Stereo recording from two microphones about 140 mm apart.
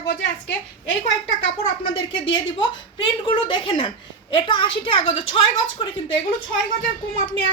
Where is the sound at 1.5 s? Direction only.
35° left (ahead or behind).